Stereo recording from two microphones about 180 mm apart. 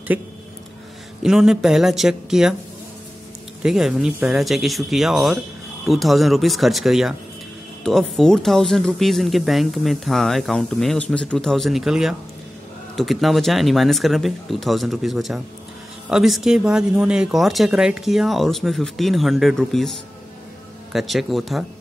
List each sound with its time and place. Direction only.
1.2 s speech: 5° right (ahead or behind)
3.6 s speech: 5° right (ahead or behind)